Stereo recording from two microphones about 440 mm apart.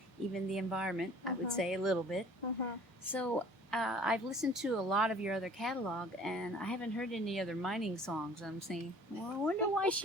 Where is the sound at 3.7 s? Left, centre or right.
Centre.